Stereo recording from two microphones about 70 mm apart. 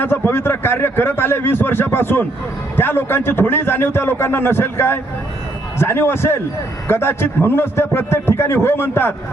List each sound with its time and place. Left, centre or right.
0.0 s a man's voice: left